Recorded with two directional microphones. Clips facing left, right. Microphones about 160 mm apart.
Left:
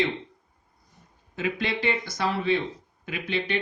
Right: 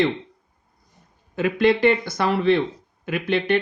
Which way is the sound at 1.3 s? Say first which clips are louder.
Right 10 dB; 55° right (ahead or behind).